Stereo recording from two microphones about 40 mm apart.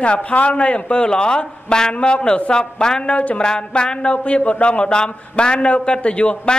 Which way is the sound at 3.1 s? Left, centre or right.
Left.